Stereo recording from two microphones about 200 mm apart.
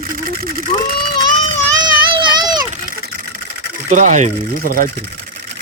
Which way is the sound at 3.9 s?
40° right (ahead or behind).